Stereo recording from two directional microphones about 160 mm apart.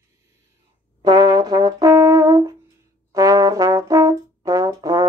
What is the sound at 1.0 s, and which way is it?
Brass instrument, 25° right (ahead or behind).